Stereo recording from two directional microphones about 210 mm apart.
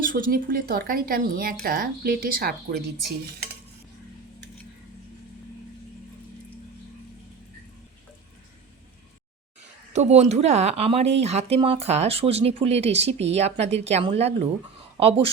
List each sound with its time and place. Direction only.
0.0 s speech: 40° right (ahead or behind)
9.9 s speech: 30° right (ahead or behind)